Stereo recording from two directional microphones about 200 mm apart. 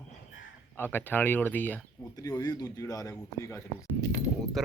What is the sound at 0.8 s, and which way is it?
Speech, 10° left (ahead or behind).